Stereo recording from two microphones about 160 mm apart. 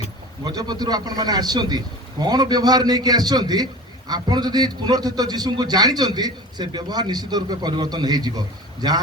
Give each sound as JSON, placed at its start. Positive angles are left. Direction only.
{"t": 0.4, "sound": "a man's voice", "side_deg": -25}